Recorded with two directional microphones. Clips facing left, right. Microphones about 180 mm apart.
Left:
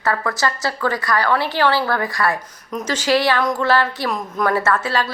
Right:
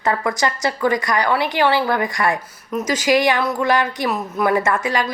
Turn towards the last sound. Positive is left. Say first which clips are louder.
# even
turn(degrees=-15)  # may be behind; listen again after turning